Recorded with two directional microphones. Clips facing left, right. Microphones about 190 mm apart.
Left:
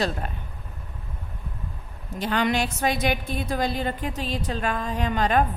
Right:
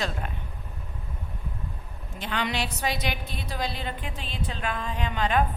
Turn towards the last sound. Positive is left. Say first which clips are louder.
# left 4 dB
turn(degrees=45)  # may be behind; listen again after turning